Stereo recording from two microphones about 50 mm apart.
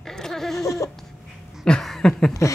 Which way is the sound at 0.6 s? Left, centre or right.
Left.